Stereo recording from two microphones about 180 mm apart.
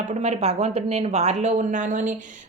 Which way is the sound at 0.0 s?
40° right (ahead or behind).